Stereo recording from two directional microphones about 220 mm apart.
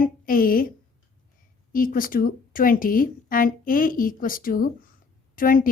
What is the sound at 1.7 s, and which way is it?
Speech, 40° left (ahead or behind).